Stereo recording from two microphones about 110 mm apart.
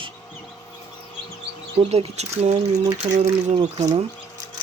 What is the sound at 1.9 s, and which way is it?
Speech, 70° right (ahead or behind).